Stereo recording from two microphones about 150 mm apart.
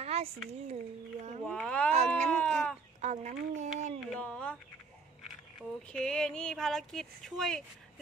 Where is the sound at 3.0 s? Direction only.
50° right (ahead or behind).